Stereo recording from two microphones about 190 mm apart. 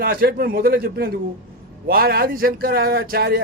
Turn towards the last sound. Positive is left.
turn(degrees=-55)  # may be behind; listen again after turning